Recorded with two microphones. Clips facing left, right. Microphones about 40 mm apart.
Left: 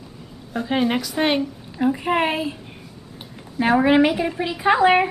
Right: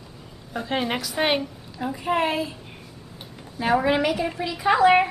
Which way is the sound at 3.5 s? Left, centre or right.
Left.